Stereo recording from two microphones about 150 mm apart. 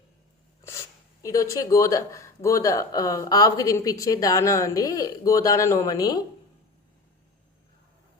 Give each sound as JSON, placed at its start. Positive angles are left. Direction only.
{"t": 1.2, "sound": "speech", "side_deg": 20}